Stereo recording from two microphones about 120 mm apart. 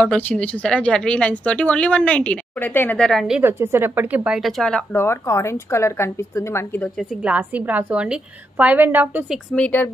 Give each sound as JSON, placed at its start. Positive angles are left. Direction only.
{"t": 0.0, "sound": "speech", "side_deg": 10}
{"t": 3.0, "sound": "speech", "side_deg": 0}
{"t": 3.3, "sound": "a woman's voice", "side_deg": -20}
{"t": 4.4, "sound": "speech", "side_deg": 0}
{"t": 4.9, "sound": "a woman's voice", "side_deg": 20}
{"t": 7.0, "sound": "a woman's voice", "side_deg": -5}
{"t": 9.6, "sound": "speech", "side_deg": 15}